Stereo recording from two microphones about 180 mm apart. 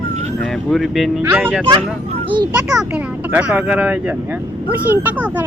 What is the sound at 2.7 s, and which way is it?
Speech, 10° right (ahead or behind).